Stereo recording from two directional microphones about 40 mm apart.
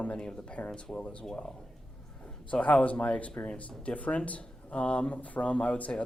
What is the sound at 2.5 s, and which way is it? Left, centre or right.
Speech, left.